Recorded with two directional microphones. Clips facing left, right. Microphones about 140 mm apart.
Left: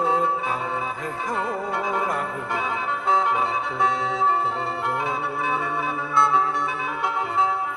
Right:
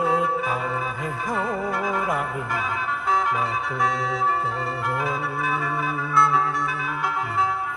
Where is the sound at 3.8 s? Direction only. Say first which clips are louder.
Left 1 dB; 25° left (ahead or behind).